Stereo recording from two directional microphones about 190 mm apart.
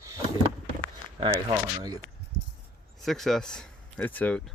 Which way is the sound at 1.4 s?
20° right (ahead or behind).